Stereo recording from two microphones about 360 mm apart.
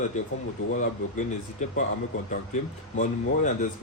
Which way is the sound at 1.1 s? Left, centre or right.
Centre.